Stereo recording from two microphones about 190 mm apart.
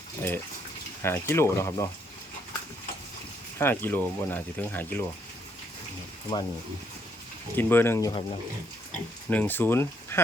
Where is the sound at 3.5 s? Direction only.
10° left (ahead or behind).